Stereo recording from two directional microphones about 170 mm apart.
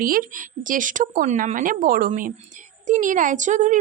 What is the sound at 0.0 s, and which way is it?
Speech, 55° right (ahead or behind).